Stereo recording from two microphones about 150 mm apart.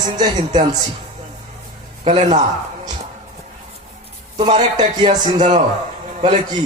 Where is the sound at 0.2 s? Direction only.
50° right (ahead or behind).